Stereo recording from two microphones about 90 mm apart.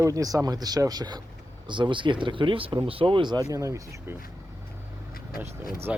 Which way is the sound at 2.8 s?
90° right.